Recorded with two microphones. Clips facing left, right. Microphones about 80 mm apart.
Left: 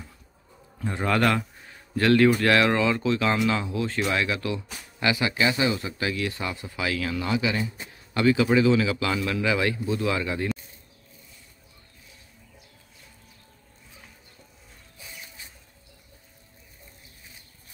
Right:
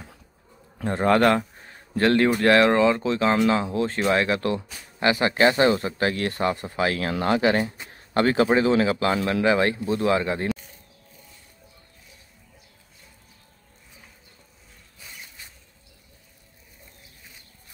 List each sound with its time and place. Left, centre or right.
0.8 s speech: right